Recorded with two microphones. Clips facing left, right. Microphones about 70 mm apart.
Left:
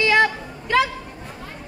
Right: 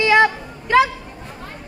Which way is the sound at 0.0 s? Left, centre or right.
Right.